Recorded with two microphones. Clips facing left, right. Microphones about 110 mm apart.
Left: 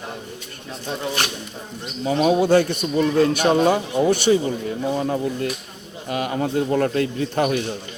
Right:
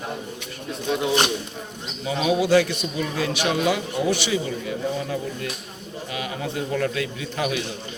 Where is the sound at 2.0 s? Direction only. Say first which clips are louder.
Left 4 dB; 45° left (ahead or behind).